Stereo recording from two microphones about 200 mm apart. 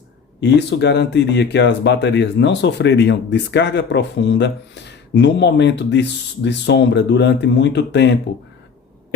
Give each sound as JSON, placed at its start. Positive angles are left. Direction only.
{"t": 0.3, "sound": "speech", "side_deg": 60}